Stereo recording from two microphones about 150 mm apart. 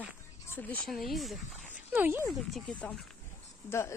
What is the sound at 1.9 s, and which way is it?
Speech, 15° right (ahead or behind).